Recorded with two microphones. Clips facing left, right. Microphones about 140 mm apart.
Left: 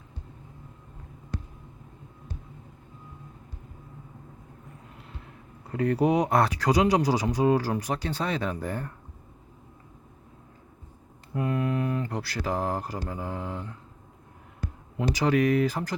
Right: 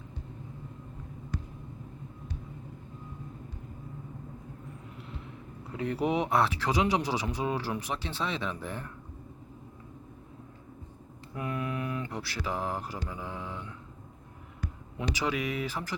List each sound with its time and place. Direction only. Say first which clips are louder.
5.7 s speech: left 6 dB; 45° left (ahead or behind)
11.3 s speech: left 6 dB; 35° left (ahead or behind)